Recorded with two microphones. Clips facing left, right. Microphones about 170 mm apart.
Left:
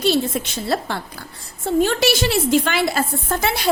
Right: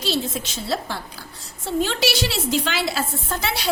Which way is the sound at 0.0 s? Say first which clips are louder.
Left 6 dB; 55° left (ahead or behind).